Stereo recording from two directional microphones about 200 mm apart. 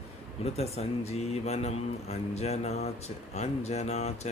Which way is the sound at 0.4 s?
30° left (ahead or behind).